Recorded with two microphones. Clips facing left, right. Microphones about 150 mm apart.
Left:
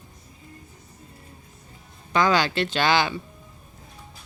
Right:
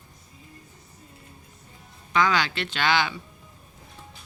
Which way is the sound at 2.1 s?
40° left (ahead or behind).